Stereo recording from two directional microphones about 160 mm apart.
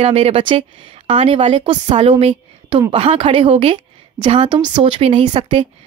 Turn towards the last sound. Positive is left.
turn(degrees=-30)  # may be behind; listen again after turning